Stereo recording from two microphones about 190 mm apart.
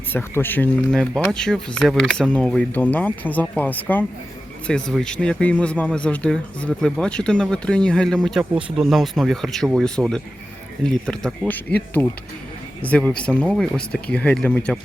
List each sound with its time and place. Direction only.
0.1 s speech: 10° left (ahead or behind)